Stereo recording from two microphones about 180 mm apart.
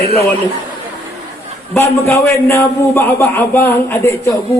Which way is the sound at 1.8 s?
15° left (ahead or behind).